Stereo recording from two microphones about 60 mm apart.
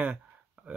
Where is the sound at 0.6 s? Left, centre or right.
Right.